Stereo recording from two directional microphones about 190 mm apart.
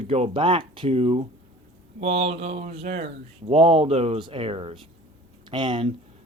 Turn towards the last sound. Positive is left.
turn(degrees=-25)  # may be behind; listen again after turning